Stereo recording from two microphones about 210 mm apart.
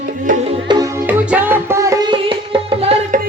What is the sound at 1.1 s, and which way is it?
Music, 10° right (ahead or behind).